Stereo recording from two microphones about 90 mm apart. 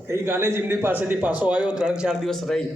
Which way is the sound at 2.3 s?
5° left (ahead or behind).